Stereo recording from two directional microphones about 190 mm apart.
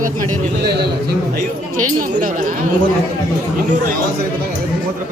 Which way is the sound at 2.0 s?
45° right (ahead or behind).